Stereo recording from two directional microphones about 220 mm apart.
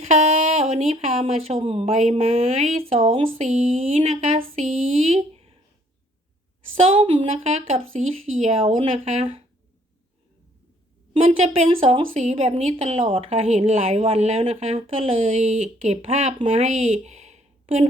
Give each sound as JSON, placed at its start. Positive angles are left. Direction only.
{"t": 0.0, "sound": "a woman's voice", "side_deg": -30}
{"t": 6.8, "sound": "a woman's voice", "side_deg": -25}
{"t": 11.1, "sound": "a woman's voice", "side_deg": -25}